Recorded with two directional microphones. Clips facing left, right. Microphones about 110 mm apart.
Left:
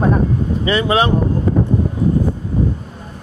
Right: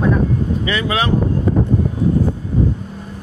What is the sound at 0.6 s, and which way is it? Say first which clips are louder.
Speech: left 8 dB; 30° left (ahead or behind).